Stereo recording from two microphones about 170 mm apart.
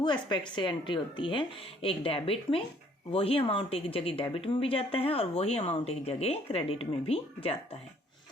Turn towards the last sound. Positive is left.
turn(degrees=35)  # may be behind; listen again after turning